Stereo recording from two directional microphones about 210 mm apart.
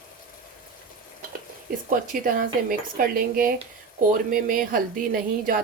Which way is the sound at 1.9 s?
40° right (ahead or behind).